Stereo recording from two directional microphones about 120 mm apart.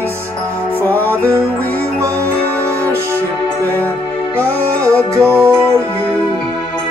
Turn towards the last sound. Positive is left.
turn(degrees=-25)  # may be behind; listen again after turning